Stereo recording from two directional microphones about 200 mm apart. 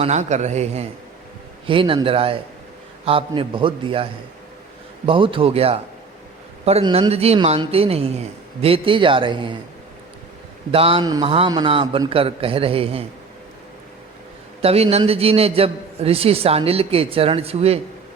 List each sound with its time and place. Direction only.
0.0 s a man's voice: 35° right (ahead or behind)
10.7 s a man's voice: 30° right (ahead or behind)
14.6 s a man's voice: 30° right (ahead or behind)